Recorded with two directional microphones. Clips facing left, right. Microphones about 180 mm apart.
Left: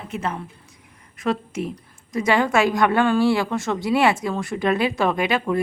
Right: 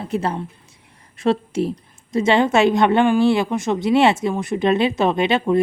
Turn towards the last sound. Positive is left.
turn(degrees=-25)  # may be behind; listen again after turning